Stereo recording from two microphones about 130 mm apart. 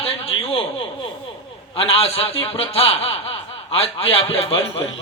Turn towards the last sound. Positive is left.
turn(degrees=45)  # may be behind; listen again after turning